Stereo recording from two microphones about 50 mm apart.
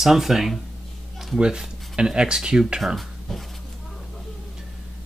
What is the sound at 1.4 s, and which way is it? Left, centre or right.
Speech, centre.